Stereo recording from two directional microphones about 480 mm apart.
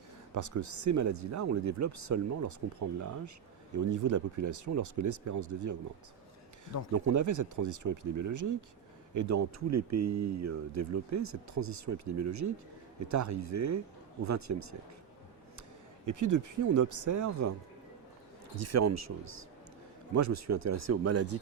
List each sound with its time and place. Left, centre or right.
0.3 s speech: right
6.9 s speech: right
16.0 s speech: right
18.5 s speech: right